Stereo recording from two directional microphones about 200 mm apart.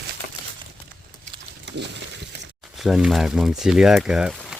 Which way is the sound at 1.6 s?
60° right (ahead or behind).